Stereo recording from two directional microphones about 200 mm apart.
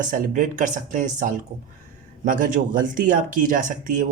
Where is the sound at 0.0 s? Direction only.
40° right (ahead or behind).